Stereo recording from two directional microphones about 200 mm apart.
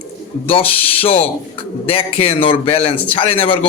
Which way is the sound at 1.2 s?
30° left (ahead or behind).